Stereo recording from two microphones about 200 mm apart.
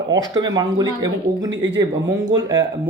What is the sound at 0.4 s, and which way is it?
Speech, 20° right (ahead or behind).